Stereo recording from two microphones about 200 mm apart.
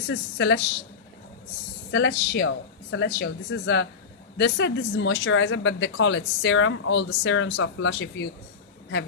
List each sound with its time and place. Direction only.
0.1 s speech: 65° left (ahead or behind)
1.9 s speech: 60° left (ahead or behind)